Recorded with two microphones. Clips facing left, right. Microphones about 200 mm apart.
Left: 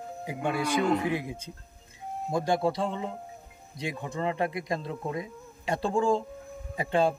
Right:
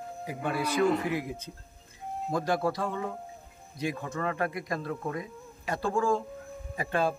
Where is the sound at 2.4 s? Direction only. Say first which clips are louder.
Left 3 dB; 20° left (ahead or behind).